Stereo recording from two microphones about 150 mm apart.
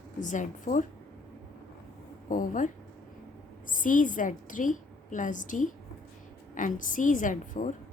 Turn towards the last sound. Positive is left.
turn(degrees=60)  # may be behind; listen again after turning